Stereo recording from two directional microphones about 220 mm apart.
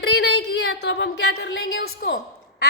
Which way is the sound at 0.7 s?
55° left (ahead or behind).